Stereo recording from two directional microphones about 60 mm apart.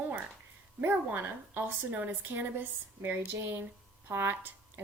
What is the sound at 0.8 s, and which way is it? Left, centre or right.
Speech, right.